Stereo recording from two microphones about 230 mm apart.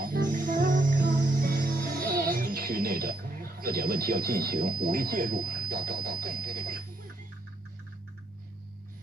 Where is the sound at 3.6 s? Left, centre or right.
Right.